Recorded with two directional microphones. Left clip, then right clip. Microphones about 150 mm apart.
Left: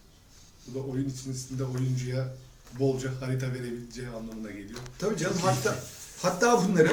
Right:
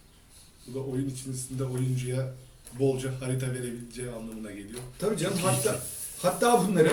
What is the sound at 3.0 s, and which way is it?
Speech, 20° left (ahead or behind).